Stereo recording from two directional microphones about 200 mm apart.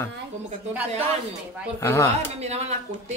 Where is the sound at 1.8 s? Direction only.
15° left (ahead or behind).